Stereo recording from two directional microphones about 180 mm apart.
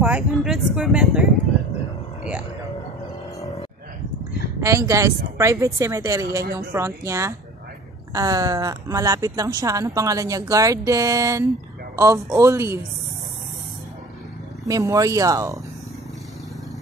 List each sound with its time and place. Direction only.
0.0 s speech: 5° right (ahead or behind)
4.6 s a woman's voice: 15° right (ahead or behind)
14.7 s a woman's voice: 20° right (ahead or behind)